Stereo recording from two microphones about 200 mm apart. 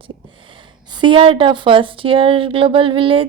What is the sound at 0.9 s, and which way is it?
Speech, 25° right (ahead or behind).